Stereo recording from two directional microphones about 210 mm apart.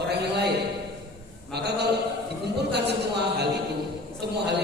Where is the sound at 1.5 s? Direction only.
50° right (ahead or behind).